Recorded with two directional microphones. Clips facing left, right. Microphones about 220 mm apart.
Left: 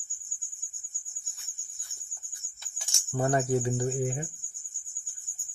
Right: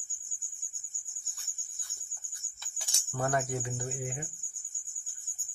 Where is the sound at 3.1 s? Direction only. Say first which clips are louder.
Left 6 dB; 25° left (ahead or behind).